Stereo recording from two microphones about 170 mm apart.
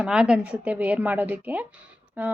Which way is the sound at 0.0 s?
5° right (ahead or behind).